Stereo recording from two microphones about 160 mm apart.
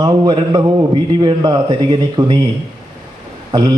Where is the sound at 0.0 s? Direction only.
30° right (ahead or behind).